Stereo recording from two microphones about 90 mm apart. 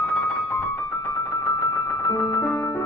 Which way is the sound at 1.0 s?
30° left (ahead or behind).